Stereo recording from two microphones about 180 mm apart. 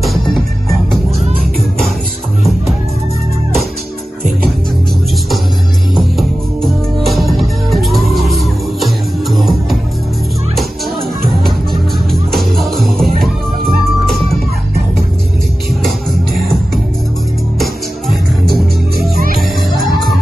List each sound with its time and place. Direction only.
5.9 s music: centre (ahead or behind)
12.1 s music: centre (ahead or behind)
17.6 s music: centre (ahead or behind)
19.1 s music: 55° right (ahead or behind)